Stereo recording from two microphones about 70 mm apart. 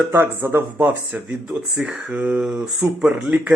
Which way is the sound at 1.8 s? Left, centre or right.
Centre.